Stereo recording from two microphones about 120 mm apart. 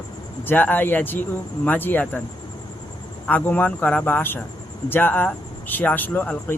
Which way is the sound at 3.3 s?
15° left (ahead or behind).